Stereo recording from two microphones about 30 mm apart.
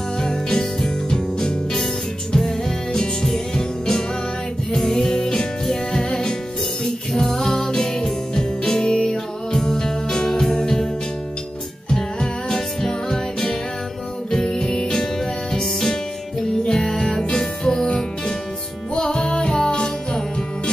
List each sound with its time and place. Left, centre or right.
0.2 s music: left
11.9 s music: left